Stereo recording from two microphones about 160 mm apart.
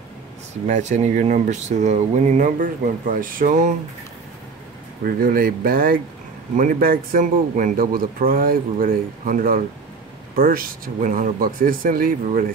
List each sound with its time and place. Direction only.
0.7 s speech: 45° right (ahead or behind)
5.0 s a man's voice: 65° right (ahead or behind)